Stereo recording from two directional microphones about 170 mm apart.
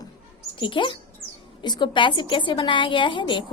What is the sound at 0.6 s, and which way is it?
A woman's voice, 30° left (ahead or behind).